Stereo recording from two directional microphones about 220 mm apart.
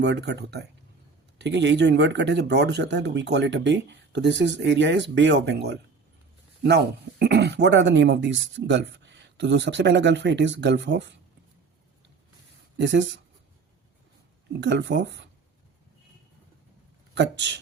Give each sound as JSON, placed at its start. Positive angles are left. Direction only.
{"t": 0.0, "sound": "speech", "side_deg": -50}
{"t": 12.7, "sound": "speech", "side_deg": -55}
{"t": 14.6, "sound": "speech", "side_deg": -55}
{"t": 17.2, "sound": "speech", "side_deg": -55}